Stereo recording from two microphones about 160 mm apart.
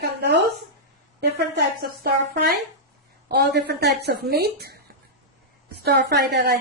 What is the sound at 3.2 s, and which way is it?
Speech, 90° right.